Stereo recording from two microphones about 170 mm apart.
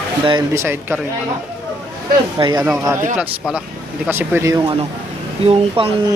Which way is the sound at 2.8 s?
15° right (ahead or behind).